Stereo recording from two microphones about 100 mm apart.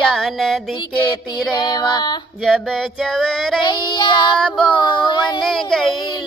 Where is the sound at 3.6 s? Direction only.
50° left (ahead or behind).